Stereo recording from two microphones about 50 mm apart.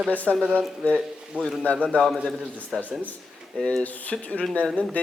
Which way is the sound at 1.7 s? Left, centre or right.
Left.